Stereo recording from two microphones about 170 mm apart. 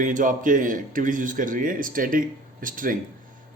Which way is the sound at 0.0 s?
50° right (ahead or behind).